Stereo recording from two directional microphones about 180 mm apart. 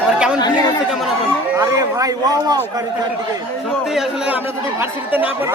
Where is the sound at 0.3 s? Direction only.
25° left (ahead or behind).